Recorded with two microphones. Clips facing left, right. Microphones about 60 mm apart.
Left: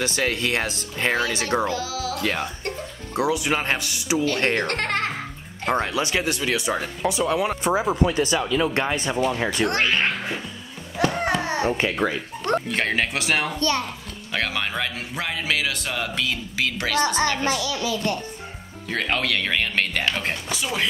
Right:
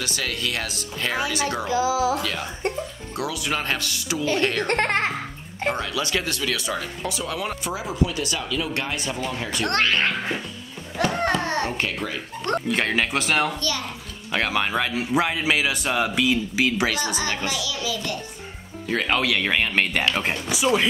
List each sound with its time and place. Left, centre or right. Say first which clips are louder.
0.0 s speech: left 4 dB; left
1.7 s speech: right 6 dB; centre
3.2 s speech: left 4 dB; left
4.4 s speech: left 1 dB; left
4.6 s speech: right 3 dB; right
5.7 s speech: left 3 dB; left
7.6 s speech: left 4 dB; left
9.7 s speech: right 4 dB; centre
11.0 s a sound: even; centre
12.6 s speech: right 1 dB; centre
13.6 s speech: left 5 dB; left
14.3 s speech: right 3 dB; centre
17.0 s a woman's voice: left 5 dB; left
18.9 s speech: right 2 dB; centre